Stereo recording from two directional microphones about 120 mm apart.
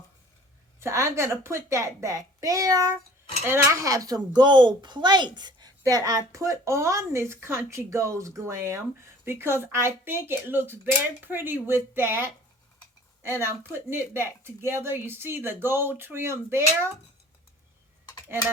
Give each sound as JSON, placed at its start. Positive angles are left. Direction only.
{"t": 0.8, "sound": "speech", "side_deg": -25}
{"t": 12.8, "sound": "a sound", "side_deg": 25}
{"t": 13.4, "sound": "speech", "side_deg": -20}